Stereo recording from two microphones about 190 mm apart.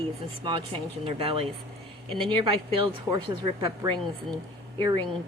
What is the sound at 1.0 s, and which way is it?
Speech, 30° right (ahead or behind).